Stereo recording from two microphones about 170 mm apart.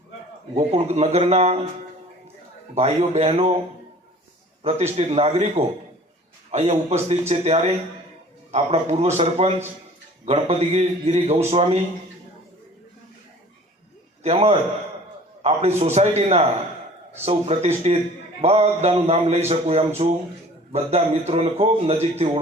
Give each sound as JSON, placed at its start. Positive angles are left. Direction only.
{"t": 0.5, "sound": "speech", "side_deg": -40}
{"t": 2.7, "sound": "speech", "side_deg": -40}
{"t": 4.6, "sound": "speech", "side_deg": -40}
{"t": 14.3, "sound": "speech", "side_deg": -35}